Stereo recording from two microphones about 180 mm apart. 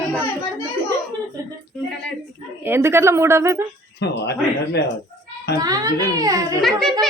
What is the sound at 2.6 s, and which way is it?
Speech, 15° right (ahead or behind).